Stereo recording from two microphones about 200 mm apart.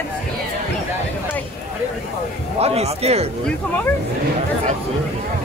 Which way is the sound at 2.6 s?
30° right (ahead or behind).